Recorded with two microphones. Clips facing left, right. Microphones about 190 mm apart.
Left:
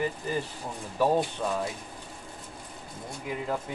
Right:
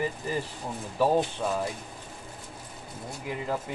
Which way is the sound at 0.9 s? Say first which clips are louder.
Right 1 dB; 5° right (ahead or behind).